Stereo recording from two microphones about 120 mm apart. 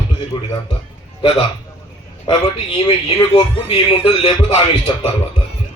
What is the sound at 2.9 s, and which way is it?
Speech, 50° left (ahead or behind).